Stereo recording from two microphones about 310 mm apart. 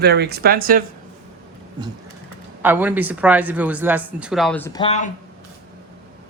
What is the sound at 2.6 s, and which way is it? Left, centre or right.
Speech, centre.